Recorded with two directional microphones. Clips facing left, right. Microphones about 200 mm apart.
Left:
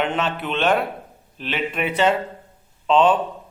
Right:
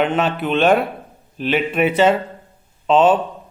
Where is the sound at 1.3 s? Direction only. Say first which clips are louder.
Right 7 dB; 10° right (ahead or behind).